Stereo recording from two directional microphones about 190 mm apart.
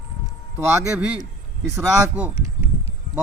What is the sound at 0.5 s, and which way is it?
Speech, 10° right (ahead or behind).